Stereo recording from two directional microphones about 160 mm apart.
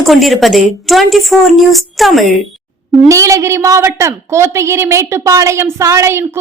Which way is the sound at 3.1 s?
20° right (ahead or behind).